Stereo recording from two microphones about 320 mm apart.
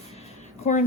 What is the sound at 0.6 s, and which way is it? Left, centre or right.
Speech, left.